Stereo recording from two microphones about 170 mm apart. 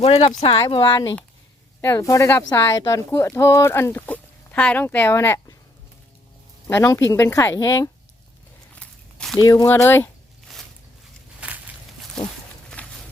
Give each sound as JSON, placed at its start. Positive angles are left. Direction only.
{"t": 0.0, "sound": "speech", "side_deg": 40}
{"t": 1.8, "sound": "speech", "side_deg": 15}
{"t": 6.7, "sound": "speech", "side_deg": 15}
{"t": 8.7, "sound": "walk", "side_deg": 5}
{"t": 9.4, "sound": "speech", "side_deg": 20}
{"t": 10.5, "sound": "a sound", "side_deg": 0}
{"t": 11.3, "sound": "walk", "side_deg": -10}
{"t": 12.8, "sound": "a sound", "side_deg": 10}